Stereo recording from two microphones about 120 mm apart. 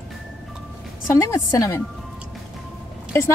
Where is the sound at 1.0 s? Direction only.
25° left (ahead or behind).